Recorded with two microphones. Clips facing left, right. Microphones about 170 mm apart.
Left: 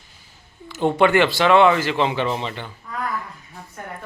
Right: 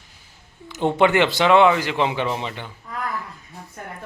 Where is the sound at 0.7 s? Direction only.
20° right (ahead or behind).